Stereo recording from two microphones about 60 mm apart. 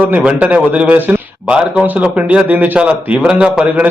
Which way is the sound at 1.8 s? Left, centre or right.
Right.